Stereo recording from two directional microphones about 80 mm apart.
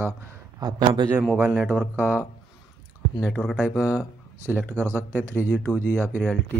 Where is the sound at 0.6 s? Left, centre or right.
Right.